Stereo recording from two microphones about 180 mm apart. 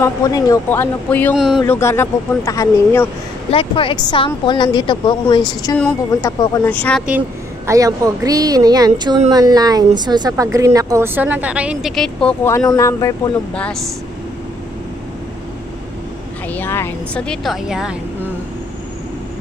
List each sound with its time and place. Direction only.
0.0 s speech: 20° left (ahead or behind)
1.3 s a woman's voice: 5° right (ahead or behind)
1.7 s speech: 15° left (ahead or behind)
3.4 s speech: 30° left (ahead or behind)
5.8 s speech: 10° left (ahead or behind)
7.1 s a woman's voice: 10° right (ahead or behind); by 13.3 s 20° left (ahead or behind)
13.6 s a woman's voice: 5° left (ahead or behind)
16.5 s a woman's voice: 10° left (ahead or behind); by 18.3 s 5° right (ahead or behind)